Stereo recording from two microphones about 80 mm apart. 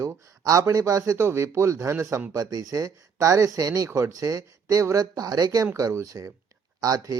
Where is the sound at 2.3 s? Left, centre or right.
Right.